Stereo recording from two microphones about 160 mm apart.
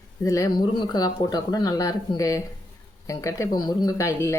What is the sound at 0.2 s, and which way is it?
Speech, 20° left (ahead or behind).